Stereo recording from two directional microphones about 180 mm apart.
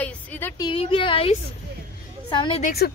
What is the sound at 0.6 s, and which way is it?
Speech, 30° left (ahead or behind).